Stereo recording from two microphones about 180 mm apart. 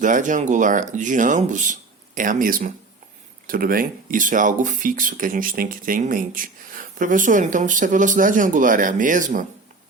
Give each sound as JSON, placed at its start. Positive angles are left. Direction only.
{"t": 0.0, "sound": "speech", "side_deg": -45}